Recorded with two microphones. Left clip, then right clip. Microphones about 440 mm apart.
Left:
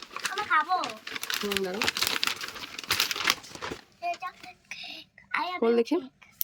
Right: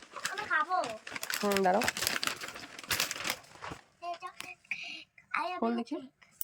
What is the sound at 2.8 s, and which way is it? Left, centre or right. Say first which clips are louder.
Crumpling: left 6 dB; centre.